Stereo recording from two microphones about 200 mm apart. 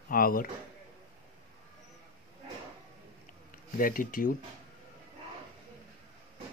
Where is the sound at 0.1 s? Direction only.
45° left (ahead or behind).